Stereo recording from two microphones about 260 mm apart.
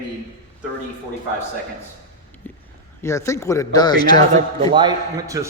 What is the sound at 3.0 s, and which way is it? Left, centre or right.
Speech, centre.